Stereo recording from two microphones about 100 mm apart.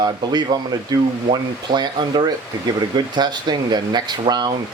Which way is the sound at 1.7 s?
50° right (ahead or behind).